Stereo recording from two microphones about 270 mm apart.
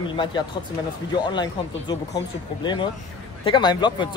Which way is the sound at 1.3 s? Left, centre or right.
Centre.